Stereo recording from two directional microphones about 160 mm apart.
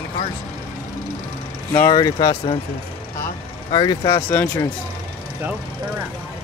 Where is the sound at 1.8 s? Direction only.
20° left (ahead or behind).